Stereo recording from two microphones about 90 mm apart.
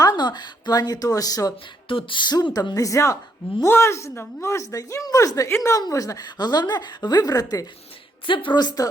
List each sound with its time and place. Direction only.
0.0 s a woman's voice: 55° left (ahead or behind)
1.9 s a woman's voice: 75° left (ahead or behind); by 7.7 s 45° left (ahead or behind)
8.3 s a woman's voice: 65° left (ahead or behind); by 8.9 s 45° left (ahead or behind)